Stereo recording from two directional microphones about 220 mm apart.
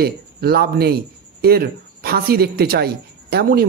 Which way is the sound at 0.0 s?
45° right (ahead or behind).